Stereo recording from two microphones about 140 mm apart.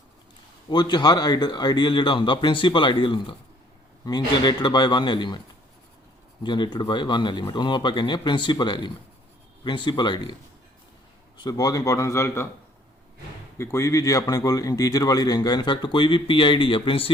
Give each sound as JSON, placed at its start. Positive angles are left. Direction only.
{"t": 0.7, "sound": "speech", "side_deg": 30}
{"t": 6.4, "sound": "speech", "side_deg": 35}
{"t": 11.3, "sound": "a man's voice", "side_deg": 30}
{"t": 13.6, "sound": "a man's voice", "side_deg": 20}